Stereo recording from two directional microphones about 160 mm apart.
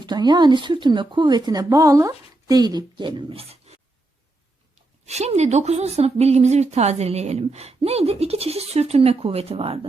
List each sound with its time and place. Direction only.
0.0 s speech: 25° right (ahead or behind)
5.0 s a woman's voice: 45° right (ahead or behind)